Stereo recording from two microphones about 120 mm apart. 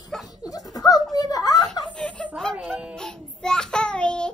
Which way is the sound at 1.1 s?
30° left (ahead or behind).